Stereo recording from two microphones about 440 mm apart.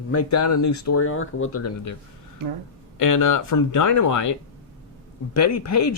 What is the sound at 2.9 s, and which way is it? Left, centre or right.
Speech, left.